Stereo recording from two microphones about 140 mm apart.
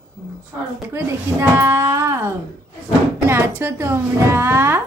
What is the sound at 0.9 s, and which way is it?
Speech, 20° right (ahead or behind).